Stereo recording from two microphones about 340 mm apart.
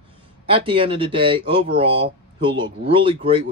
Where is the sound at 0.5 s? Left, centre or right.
Centre.